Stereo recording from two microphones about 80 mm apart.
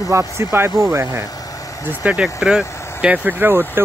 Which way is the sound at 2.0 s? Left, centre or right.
Centre.